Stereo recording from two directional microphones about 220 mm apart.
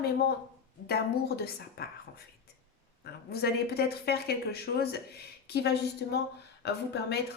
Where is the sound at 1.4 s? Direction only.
45° left (ahead or behind).